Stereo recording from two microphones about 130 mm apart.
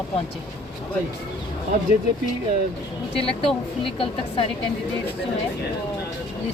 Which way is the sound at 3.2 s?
45° left (ahead or behind).